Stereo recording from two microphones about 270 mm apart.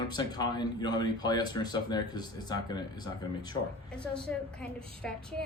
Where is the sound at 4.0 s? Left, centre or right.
Centre.